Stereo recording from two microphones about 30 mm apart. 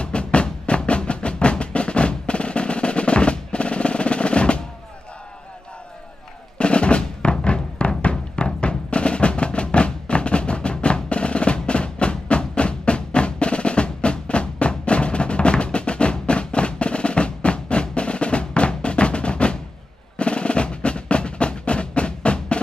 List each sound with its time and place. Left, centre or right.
0.0 s music: left
6.6 s music: left